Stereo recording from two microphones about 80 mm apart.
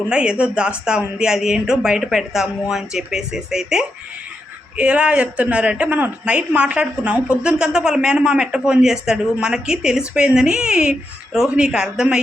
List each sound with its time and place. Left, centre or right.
0.1 s a woman's voice: centre